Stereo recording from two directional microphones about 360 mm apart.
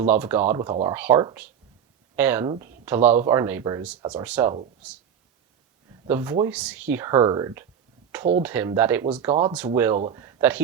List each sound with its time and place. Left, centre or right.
0.1 s speech: centre
6.1 s speech: centre